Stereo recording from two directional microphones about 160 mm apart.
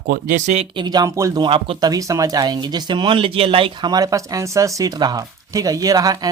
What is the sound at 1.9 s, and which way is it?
Speech, 20° right (ahead or behind).